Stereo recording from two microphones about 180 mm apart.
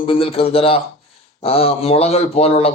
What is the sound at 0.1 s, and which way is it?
A man's voice, 30° left (ahead or behind).